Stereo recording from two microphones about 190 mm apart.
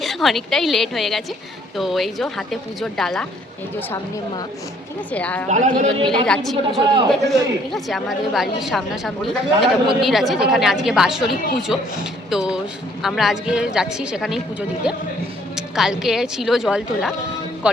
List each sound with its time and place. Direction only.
0.0 s a woman's voice: centre (ahead or behind)
5.1 s a woman's voice: 5° left (ahead or behind)
5.5 s a man's voice: 40° right (ahead or behind)
6.1 s a woman's voice: 5° left (ahead or behind)